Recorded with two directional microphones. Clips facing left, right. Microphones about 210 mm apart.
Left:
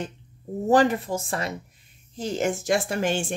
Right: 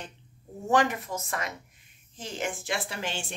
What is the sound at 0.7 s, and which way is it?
Speech, 35° left (ahead or behind).